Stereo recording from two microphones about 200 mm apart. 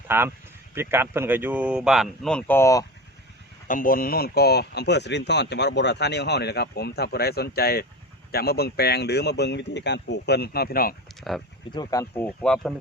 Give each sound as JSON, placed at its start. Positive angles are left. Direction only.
{"t": 0.1, "sound": "speech", "side_deg": -10}
{"t": 3.7, "sound": "speech", "side_deg": 45}
{"t": 11.2, "sound": "speech", "side_deg": 0}
{"t": 11.7, "sound": "speech", "side_deg": 20}